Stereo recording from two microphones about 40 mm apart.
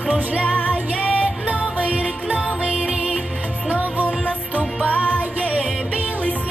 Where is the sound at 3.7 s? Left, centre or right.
Right.